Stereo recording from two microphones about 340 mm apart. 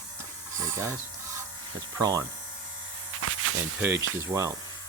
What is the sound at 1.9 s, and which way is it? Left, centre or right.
Speech, centre.